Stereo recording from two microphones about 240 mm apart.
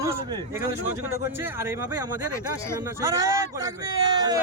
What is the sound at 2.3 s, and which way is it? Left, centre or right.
Speech, centre.